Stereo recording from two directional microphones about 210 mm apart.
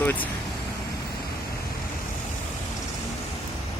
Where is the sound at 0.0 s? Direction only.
10° left (ahead or behind).